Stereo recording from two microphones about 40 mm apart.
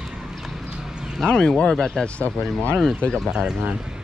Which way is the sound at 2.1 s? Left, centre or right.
Left.